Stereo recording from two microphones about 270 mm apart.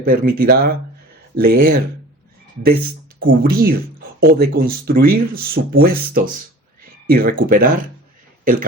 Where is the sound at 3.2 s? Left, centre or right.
Right.